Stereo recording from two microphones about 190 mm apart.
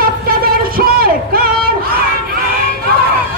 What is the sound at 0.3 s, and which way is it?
Music, 50° right (ahead or behind).